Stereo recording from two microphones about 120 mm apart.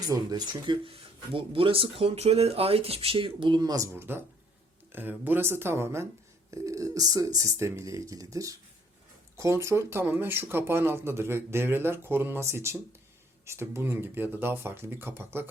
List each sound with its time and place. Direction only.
0.0 s speech: 30° right (ahead or behind)
3.6 s speech: 30° right (ahead or behind)
3.9 s speech: 20° right (ahead or behind)